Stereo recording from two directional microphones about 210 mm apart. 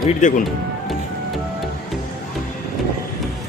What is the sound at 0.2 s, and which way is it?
Speech, 35° left (ahead or behind).